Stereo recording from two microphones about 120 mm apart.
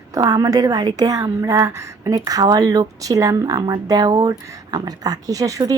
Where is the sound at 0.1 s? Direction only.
30° right (ahead or behind).